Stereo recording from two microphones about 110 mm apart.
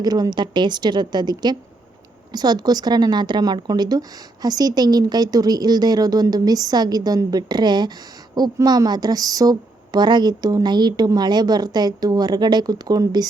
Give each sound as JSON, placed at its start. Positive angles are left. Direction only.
{"t": 0.0, "sound": "speech", "side_deg": -35}